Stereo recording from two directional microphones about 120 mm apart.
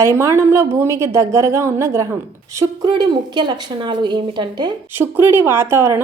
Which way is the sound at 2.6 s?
35° right (ahead or behind).